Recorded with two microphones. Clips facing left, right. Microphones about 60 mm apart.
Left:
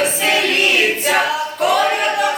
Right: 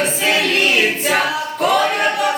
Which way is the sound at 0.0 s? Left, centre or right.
Centre.